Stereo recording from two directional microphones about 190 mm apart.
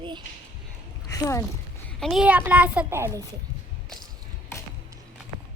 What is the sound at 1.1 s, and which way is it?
Speech, 15° left (ahead or behind).